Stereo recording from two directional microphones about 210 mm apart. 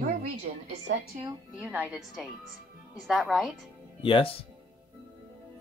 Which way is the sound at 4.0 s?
25° left (ahead or behind).